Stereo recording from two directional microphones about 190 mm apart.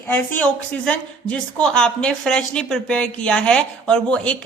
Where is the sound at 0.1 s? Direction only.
10° left (ahead or behind).